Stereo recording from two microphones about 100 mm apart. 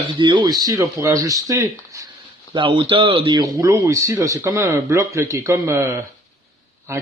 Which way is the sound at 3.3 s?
35° right (ahead or behind).